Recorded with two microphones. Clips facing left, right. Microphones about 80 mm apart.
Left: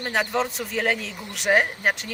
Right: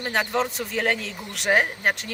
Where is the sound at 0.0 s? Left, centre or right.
Centre.